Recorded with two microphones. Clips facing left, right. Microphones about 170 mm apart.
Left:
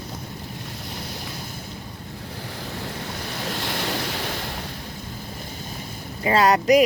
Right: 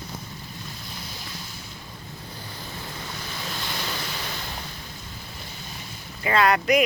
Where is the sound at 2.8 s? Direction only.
65° left (ahead or behind).